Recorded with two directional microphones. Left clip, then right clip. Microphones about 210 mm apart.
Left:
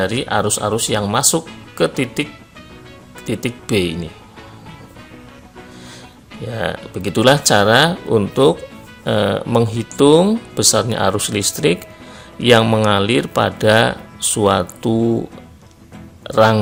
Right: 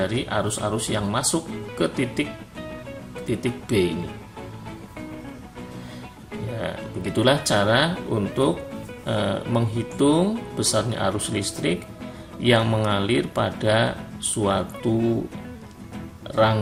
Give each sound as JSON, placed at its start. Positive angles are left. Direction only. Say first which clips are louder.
{"t": 0.0, "sound": "speech", "louder": "left 7 dB", "side_deg": 50}
{"t": 3.2, "sound": "speech", "louder": "left 5 dB", "side_deg": 50}
{"t": 6.6, "sound": "speech", "louder": "left 9 dB", "side_deg": 50}
{"t": 16.2, "sound": "speech", "louder": "left 7 dB", "side_deg": 50}